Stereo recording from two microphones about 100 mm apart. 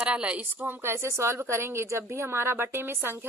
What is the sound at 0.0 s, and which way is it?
Speech, 10° right (ahead or behind).